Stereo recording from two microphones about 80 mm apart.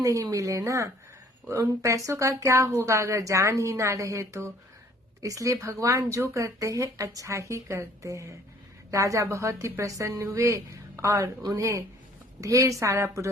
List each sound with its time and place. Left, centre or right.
0.0 s speech: right